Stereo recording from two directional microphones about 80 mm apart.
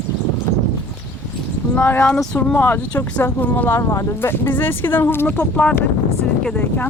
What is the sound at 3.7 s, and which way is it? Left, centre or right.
Speech, left.